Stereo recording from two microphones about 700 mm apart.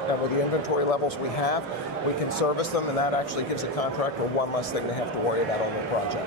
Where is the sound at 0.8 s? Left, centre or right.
Left.